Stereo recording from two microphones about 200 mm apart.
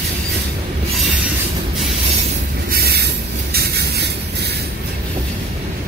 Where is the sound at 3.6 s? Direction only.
55° right (ahead or behind).